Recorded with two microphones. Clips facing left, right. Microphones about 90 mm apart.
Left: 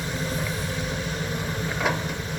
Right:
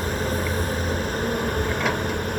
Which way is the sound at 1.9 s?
55° right (ahead or behind).